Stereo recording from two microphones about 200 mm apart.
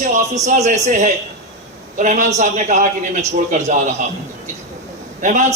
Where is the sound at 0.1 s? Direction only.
35° right (ahead or behind).